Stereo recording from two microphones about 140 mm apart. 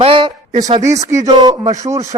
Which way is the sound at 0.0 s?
40° right (ahead or behind).